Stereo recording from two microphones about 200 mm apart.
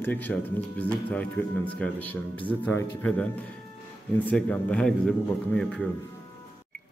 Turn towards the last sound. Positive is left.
turn(degrees=5)  # may be behind; listen again after turning